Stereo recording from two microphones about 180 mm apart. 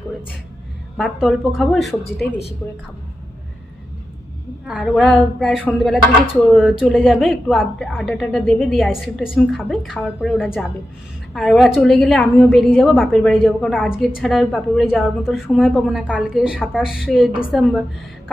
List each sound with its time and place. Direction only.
0.9 s a woman's voice: 5° right (ahead or behind)
4.6 s a woman's voice: centre (ahead or behind)